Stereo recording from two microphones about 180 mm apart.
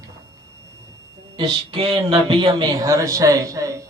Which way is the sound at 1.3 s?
30° right (ahead or behind).